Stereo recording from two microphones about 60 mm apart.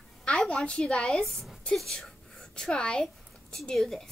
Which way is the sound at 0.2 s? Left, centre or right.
Centre.